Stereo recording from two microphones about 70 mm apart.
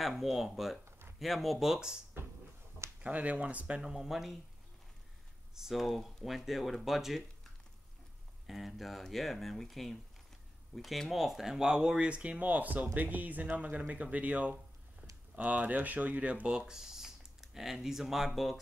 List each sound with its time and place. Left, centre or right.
0.0 s speech: centre
0.8 s a sound: right
1.2 s speech: centre
2.2 s music: right
3.0 s speech: right; by 4.4 s centre
5.5 s speech: centre
8.5 s speech: centre